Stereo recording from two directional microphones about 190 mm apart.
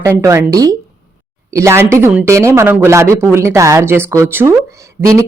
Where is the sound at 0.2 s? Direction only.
15° right (ahead or behind).